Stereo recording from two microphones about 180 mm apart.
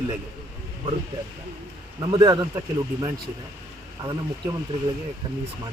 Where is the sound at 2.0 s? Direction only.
25° right (ahead or behind).